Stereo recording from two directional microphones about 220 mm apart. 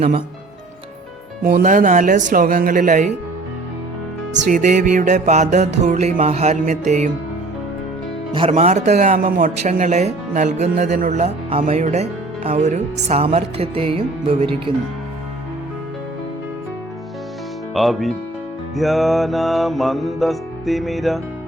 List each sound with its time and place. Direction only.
1.5 s speech: 35° right (ahead or behind)
4.4 s speech: 35° right (ahead or behind)
8.3 s speech: 25° right (ahead or behind)
17.7 s music: centre (ahead or behind)